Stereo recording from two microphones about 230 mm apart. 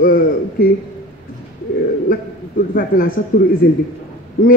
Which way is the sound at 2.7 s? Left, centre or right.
Left.